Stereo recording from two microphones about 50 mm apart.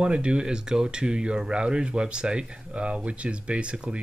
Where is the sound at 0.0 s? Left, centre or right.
Right.